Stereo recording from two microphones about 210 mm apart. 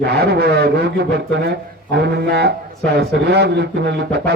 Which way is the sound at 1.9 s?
55° right (ahead or behind).